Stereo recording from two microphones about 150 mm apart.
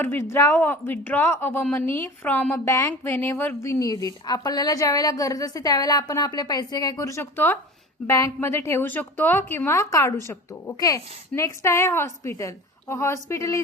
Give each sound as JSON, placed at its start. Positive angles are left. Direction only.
{"t": 0.0, "sound": "a woman's voice", "side_deg": 15}